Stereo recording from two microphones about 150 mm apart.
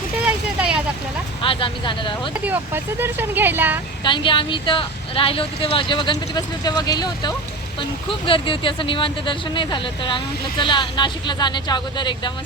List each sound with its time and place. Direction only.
0.3 s vehicle: 10° right (ahead or behind)
1.4 s speech: 35° left (ahead or behind)
2.3 s speech: 10° right (ahead or behind)
4.0 s speech: 35° left (ahead or behind)